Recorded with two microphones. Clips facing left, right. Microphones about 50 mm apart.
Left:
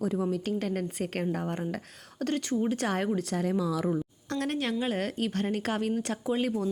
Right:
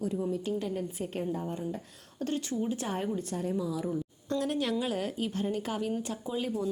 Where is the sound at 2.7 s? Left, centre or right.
Left.